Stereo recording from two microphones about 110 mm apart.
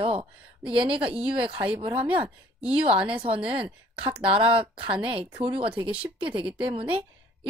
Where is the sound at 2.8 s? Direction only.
55° right (ahead or behind).